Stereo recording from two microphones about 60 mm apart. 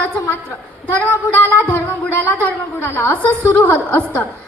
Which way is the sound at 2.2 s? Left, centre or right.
Left.